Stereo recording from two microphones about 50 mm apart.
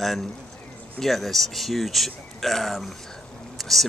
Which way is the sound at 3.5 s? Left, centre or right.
Centre.